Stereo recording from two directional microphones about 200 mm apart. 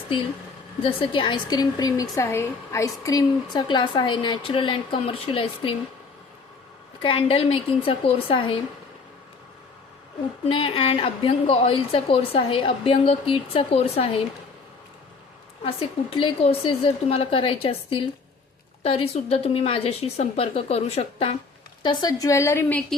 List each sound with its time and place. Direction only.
0.8 s a woman's voice: 25° left (ahead or behind)
7.0 s a woman's voice: 25° left (ahead or behind)
10.5 s a woman's voice: 25° left (ahead or behind)
15.6 s a woman's voice: 25° left (ahead or behind)
21.8 s a woman's voice: 20° left (ahead or behind)